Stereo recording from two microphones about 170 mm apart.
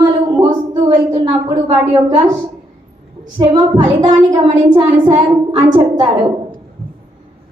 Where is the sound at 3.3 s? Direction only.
25° right (ahead or behind).